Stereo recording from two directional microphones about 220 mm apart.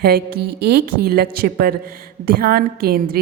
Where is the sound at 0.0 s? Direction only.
45° right (ahead or behind).